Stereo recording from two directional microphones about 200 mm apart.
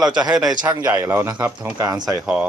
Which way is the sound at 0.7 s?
20° right (ahead or behind).